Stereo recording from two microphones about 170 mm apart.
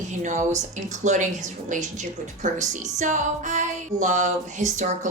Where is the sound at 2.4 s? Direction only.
45° right (ahead or behind).